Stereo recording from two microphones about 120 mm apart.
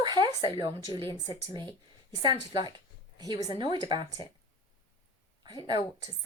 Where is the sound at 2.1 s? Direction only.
35° right (ahead or behind).